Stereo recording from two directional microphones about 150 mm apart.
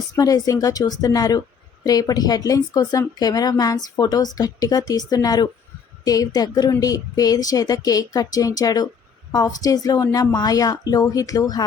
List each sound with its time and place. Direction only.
0.2 s speech: 25° left (ahead or behind)